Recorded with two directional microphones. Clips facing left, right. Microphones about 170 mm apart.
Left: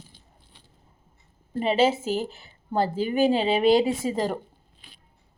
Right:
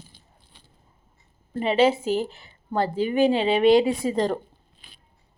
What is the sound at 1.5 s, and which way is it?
Speech, 35° left (ahead or behind).